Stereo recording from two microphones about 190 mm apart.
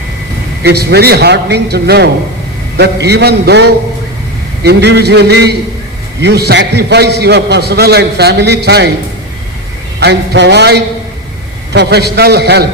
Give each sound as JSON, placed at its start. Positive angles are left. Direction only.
{"t": 0.6, "sound": "a man's voice", "side_deg": -60}
{"t": 10.0, "sound": "a man's voice", "side_deg": -60}